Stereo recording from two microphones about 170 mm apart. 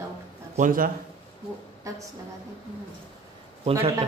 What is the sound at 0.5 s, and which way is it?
Speech, 55° right (ahead or behind).